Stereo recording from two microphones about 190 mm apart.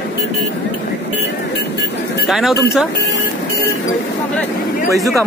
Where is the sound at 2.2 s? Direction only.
Centre (ahead or behind).